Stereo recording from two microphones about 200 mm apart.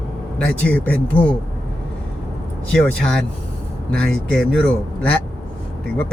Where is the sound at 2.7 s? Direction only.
5° left (ahead or behind).